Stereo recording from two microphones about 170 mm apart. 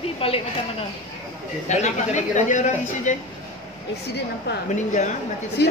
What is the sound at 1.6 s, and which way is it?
Speech, 45° left (ahead or behind).